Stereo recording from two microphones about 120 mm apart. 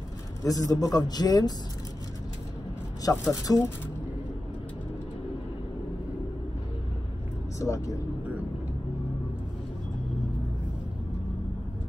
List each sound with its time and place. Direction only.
0.4 s a man's voice: 30° left (ahead or behind)
3.0 s speech: 30° left (ahead or behind)
7.5 s speech: 25° left (ahead or behind)